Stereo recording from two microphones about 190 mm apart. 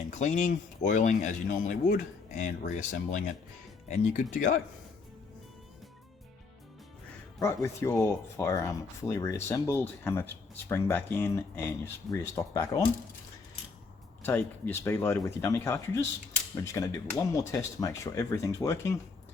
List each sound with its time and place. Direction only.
0.1 s speech: 40° left (ahead or behind)
7.3 s speech: 15° left (ahead or behind)
14.3 s speech: 10° left (ahead or behind)